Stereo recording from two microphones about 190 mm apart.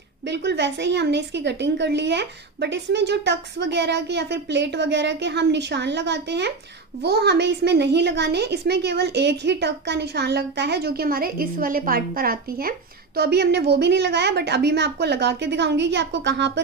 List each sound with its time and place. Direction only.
0.2 s a woman's voice: 65° right (ahead or behind)